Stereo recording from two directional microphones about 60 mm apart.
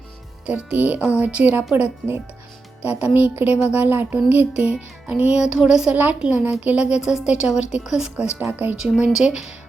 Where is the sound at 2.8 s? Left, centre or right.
Right.